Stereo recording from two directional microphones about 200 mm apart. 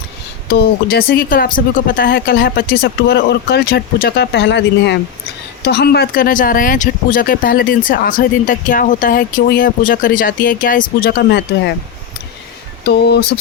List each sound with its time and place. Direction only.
0.5 s speech: 55° left (ahead or behind)
12.8 s speech: 55° left (ahead or behind)